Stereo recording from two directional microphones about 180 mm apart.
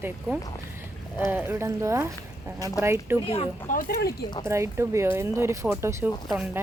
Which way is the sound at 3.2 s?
30° left (ahead or behind).